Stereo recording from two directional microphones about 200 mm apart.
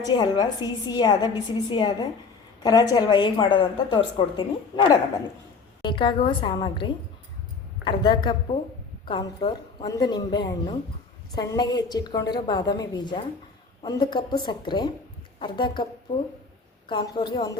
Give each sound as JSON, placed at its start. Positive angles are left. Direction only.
{"t": 0.0, "sound": "a woman's voice", "side_deg": 20}
{"t": 16.9, "sound": "a woman's voice", "side_deg": 25}